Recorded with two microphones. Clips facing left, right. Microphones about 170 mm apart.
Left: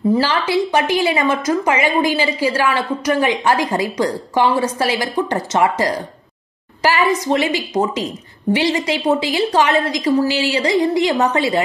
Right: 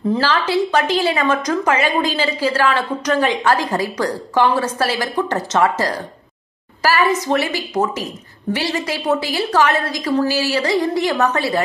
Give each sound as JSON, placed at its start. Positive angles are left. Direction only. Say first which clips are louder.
{"t": 0.1, "sound": "a woman's voice", "louder": "even", "side_deg": 10}